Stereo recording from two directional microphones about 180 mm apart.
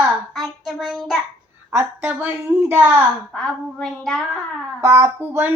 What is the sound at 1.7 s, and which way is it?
Speech, 15° right (ahead or behind).